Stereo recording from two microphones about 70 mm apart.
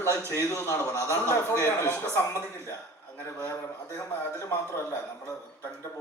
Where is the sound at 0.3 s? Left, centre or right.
Left.